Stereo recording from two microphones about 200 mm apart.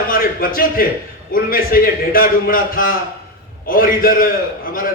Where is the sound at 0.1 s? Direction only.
45° left (ahead or behind).